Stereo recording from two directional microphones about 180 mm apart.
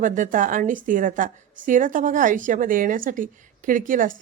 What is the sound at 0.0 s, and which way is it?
A woman's voice, 45° right (ahead or behind).